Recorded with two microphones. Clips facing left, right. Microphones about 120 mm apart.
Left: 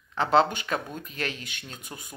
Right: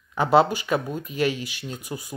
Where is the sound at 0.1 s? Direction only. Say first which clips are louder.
Right 3 dB; 10° right (ahead or behind).